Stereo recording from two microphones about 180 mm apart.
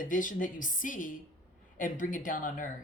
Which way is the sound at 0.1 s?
50° left (ahead or behind).